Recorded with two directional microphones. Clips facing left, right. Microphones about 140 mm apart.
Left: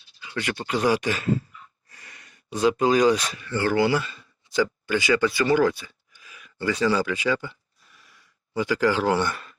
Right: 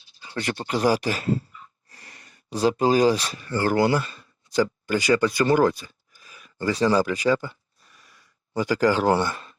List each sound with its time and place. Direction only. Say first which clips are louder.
0.2 s speech: right 1 dB; 35° right (ahead or behind)
8.5 s speech: right 1 dB; 40° right (ahead or behind)
9.2 s speech: even; 30° right (ahead or behind)